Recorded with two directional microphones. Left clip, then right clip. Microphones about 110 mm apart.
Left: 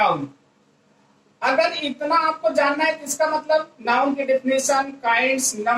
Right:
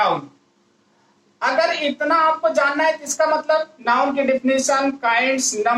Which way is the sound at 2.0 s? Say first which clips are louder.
Right 3 dB; 40° right (ahead or behind).